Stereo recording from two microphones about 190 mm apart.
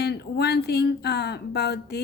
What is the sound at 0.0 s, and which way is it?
Speech, 60° left (ahead or behind).